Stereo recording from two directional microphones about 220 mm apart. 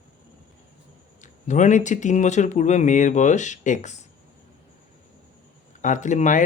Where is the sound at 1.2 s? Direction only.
35° left (ahead or behind).